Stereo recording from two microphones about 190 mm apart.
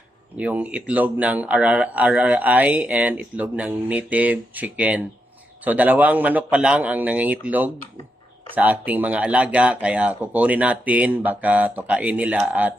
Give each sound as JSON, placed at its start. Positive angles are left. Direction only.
{"t": 0.3, "sound": "speech", "side_deg": -10}